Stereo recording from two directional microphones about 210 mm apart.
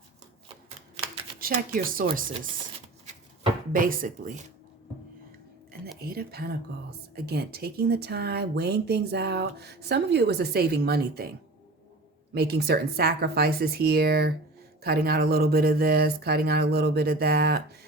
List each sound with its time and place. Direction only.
1.4 s speech: 45° right (ahead or behind)
3.7 s speech: 40° right (ahead or behind)
6.0 s speech: 45° right (ahead or behind)
12.3 s speech: 50° right (ahead or behind)